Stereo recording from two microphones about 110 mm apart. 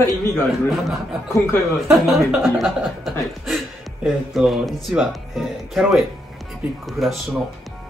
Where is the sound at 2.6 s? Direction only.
Centre (ahead or behind).